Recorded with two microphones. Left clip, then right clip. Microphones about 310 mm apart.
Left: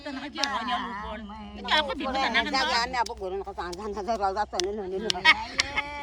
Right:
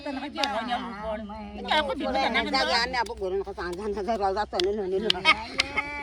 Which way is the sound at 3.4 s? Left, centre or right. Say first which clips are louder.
Right 2 dB; left.